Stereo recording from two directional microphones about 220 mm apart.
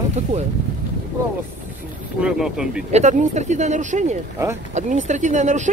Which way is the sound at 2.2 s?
Centre (ahead or behind).